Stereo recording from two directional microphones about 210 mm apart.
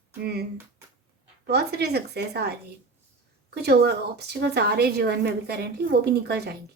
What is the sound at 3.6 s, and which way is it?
Speech, 50° right (ahead or behind).